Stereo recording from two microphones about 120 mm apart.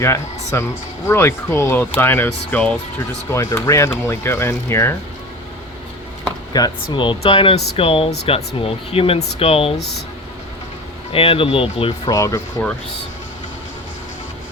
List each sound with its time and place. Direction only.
0.5 s speech: 20° left (ahead or behind)
6.5 s speech: 40° left (ahead or behind); by 9.8 s 55° left (ahead or behind)
11.1 s speech: 50° left (ahead or behind)
12.0 s speech: 25° left (ahead or behind)